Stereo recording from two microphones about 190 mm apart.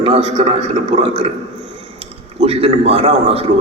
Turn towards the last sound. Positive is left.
turn(degrees=-30)  # may be behind; listen again after turning